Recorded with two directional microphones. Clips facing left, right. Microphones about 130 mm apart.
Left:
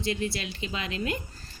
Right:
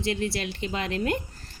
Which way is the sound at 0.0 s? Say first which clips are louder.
Right 2 dB; 70° right (ahead or behind).